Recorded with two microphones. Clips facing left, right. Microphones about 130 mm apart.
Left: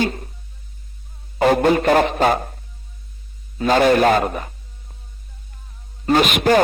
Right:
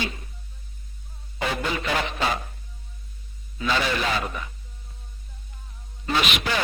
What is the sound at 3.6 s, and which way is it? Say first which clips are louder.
Speech: left 11 dB; 50° left (ahead or behind).